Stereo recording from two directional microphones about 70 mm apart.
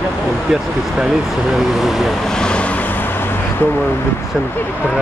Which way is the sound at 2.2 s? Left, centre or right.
Centre.